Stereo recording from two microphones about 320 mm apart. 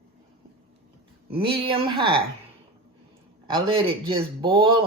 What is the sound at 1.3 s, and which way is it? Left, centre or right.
Speech, centre.